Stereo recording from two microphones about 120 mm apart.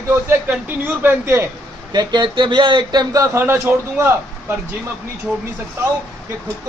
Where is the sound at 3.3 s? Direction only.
20° right (ahead or behind).